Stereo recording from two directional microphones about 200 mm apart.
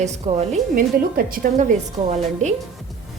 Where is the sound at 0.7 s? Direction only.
45° right (ahead or behind).